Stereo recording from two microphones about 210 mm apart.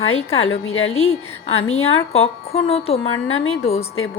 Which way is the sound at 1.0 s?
30° left (ahead or behind).